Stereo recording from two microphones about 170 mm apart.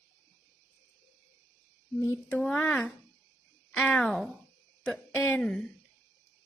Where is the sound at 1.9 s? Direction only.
15° left (ahead or behind).